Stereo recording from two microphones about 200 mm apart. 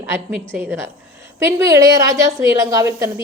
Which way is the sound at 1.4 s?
15° right (ahead or behind).